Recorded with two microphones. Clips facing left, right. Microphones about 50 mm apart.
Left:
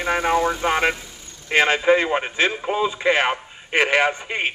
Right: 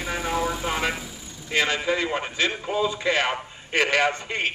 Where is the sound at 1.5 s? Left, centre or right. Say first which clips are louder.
Left 7 dB; left.